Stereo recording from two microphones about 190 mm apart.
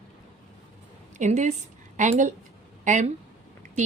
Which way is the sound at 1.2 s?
40° right (ahead or behind).